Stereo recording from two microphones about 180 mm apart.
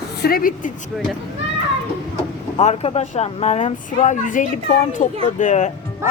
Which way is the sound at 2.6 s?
35° left (ahead or behind).